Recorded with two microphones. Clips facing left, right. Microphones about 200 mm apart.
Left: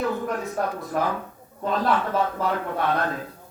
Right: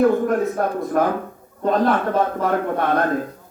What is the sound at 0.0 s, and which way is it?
A man's voice, 50° right (ahead or behind).